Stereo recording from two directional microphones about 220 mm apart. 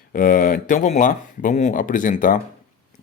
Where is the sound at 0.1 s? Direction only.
40° left (ahead or behind).